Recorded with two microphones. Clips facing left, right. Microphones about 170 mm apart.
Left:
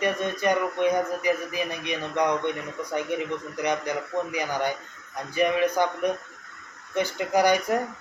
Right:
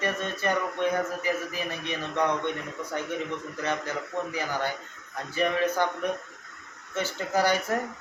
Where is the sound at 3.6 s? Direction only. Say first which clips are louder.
Left 4 dB; 15° left (ahead or behind).